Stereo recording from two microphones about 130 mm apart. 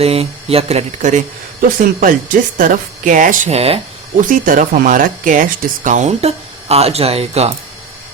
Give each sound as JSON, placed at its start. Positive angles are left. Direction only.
{"t": 0.0, "sound": "speech", "side_deg": -50}
{"t": 2.0, "sound": "a woman's voice", "side_deg": -90}
{"t": 3.5, "sound": "speech", "side_deg": -50}
{"t": 4.3, "sound": "speech", "side_deg": -90}